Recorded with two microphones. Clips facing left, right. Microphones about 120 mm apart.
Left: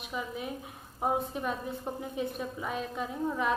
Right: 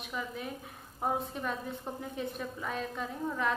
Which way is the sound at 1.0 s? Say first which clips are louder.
Left 3 dB; 15° left (ahead or behind).